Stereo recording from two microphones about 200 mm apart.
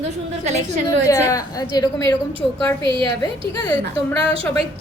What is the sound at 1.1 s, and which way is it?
A woman's voice, 15° left (ahead or behind).